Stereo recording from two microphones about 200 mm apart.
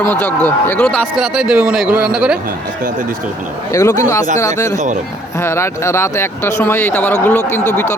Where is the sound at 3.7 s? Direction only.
15° left (ahead or behind).